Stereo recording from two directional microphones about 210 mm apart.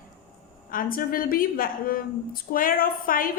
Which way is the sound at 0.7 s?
40° left (ahead or behind).